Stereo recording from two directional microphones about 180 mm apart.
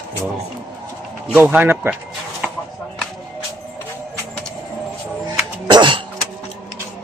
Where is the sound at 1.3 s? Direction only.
10° right (ahead or behind).